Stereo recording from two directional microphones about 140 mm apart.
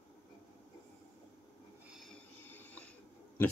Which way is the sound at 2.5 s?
10° left (ahead or behind).